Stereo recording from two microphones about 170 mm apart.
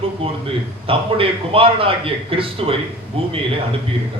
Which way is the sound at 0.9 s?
35° right (ahead or behind).